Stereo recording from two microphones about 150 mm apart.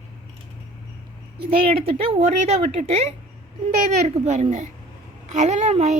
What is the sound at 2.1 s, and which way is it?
A child's voice, 45° right (ahead or behind).